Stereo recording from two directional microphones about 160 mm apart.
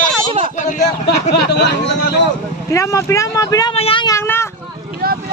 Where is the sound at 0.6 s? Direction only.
50° left (ahead or behind).